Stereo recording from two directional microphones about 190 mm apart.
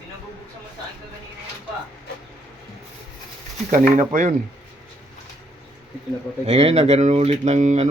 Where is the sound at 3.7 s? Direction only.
45° right (ahead or behind).